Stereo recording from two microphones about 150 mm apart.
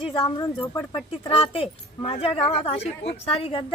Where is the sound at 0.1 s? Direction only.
30° left (ahead or behind).